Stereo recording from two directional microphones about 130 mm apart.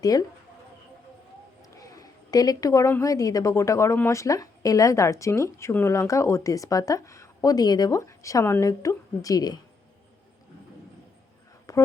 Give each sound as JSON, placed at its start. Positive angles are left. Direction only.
{"t": 0.0, "sound": "a woman's voice", "side_deg": 30}
{"t": 1.7, "sound": "a woman's voice", "side_deg": 25}
{"t": 11.7, "sound": "a sound", "side_deg": 25}